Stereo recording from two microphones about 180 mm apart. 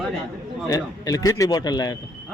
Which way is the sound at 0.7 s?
20° left (ahead or behind).